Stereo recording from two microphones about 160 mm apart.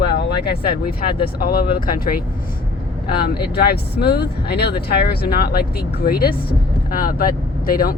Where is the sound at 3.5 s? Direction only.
80° left.